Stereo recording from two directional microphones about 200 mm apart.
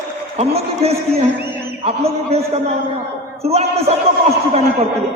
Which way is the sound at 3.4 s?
30° right (ahead or behind).